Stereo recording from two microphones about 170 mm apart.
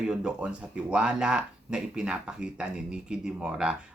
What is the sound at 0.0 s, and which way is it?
Speech, 5° right (ahead or behind).